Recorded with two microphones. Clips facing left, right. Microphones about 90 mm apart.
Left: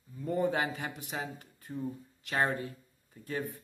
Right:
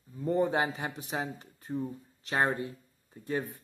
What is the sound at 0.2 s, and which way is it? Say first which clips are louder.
Speech: right 3 dB; 25° right (ahead or behind).